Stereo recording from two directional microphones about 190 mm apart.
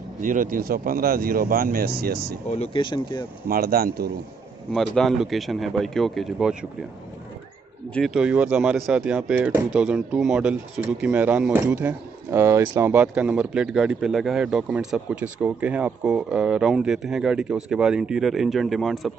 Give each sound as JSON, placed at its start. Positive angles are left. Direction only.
{"t": 0.2, "sound": "speech", "side_deg": -45}
{"t": 2.5, "sound": "speech", "side_deg": 30}
{"t": 3.4, "sound": "speech", "side_deg": -50}
{"t": 4.7, "sound": "speech", "side_deg": 0}
{"t": 7.9, "sound": "speech", "side_deg": 0}